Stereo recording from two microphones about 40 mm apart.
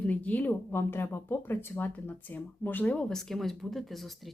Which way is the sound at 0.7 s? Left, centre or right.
Left.